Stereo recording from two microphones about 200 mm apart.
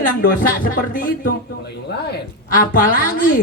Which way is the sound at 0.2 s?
45° left (ahead or behind).